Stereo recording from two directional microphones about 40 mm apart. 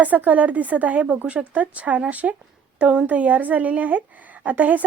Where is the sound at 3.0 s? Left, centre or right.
Right.